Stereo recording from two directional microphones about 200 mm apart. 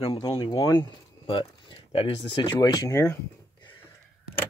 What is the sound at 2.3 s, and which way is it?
Speech, 20° left (ahead or behind).